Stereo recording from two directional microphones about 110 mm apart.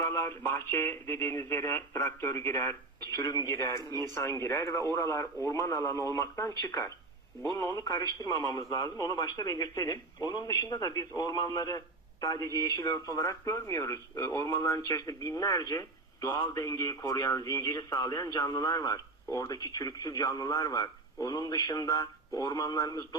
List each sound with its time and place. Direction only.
0.0 s speech: 25° left (ahead or behind)